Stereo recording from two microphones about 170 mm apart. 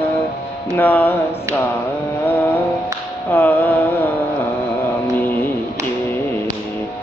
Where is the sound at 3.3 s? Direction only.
10° left (ahead or behind).